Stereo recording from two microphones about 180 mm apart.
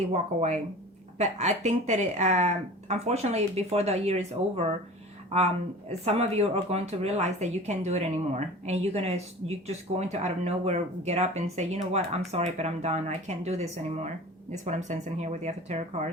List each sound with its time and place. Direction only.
0.1 s speech: 40° right (ahead or behind)
5.9 s speech: 35° right (ahead or behind)